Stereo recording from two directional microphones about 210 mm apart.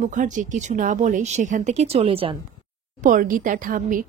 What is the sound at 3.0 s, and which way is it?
A woman's voice, 40° right (ahead or behind).